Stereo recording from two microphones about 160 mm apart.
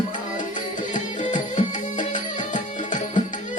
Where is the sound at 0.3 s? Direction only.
50° left (ahead or behind).